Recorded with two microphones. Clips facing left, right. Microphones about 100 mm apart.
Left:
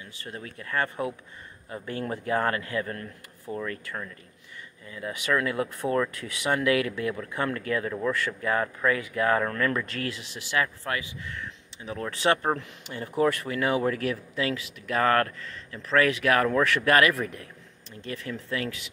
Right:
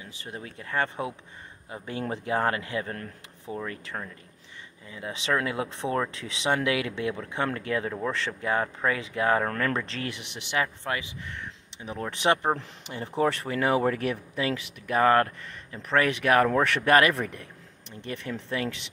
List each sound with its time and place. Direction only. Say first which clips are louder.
0.0 s speech: even; 20° right (ahead or behind)
4.8 s speech: left 1 dB; 25° right (ahead or behind)
9.4 s speech: left 1 dB; 40° right (ahead or behind)